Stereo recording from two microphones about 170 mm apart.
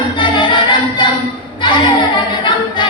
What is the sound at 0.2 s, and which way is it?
Music, 30° left (ahead or behind).